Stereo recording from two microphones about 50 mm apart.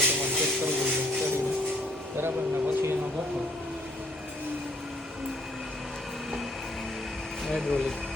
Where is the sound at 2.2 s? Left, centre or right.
Right.